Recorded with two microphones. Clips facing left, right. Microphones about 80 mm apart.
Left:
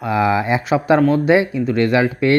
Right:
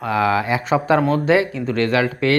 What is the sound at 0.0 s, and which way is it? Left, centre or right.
Speech, centre.